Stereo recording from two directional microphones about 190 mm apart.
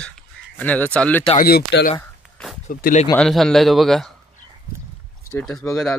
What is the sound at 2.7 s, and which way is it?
Speech, 45° left (ahead or behind).